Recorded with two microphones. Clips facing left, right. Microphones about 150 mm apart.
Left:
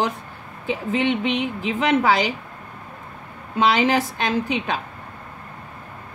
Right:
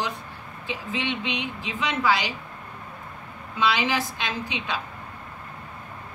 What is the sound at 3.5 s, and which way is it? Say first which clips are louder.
A woman's voice: left 6 dB; 45° left (ahead or behind).